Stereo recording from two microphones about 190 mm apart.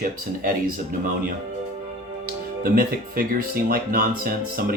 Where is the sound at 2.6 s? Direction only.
50° right (ahead or behind).